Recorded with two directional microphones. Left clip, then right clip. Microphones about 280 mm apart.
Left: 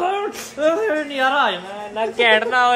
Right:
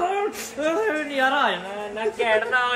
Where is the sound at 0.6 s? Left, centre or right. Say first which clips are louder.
Left 5 dB; centre.